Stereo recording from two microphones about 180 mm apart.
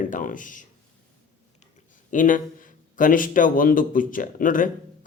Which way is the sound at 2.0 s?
45° left (ahead or behind).